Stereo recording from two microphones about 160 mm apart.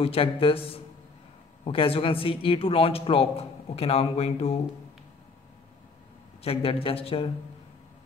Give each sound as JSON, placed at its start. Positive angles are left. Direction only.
{"t": 0.0, "sound": "speech", "side_deg": 35}
{"t": 6.4, "sound": "speech", "side_deg": 35}